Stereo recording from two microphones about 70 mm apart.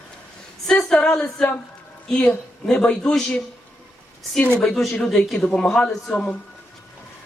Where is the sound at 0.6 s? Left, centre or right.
Centre.